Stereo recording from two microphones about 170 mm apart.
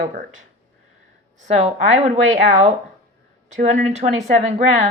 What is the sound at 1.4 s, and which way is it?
A woman's voice, 45° right (ahead or behind).